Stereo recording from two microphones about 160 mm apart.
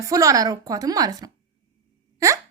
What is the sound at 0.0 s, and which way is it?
A woman's voice, 20° right (ahead or behind).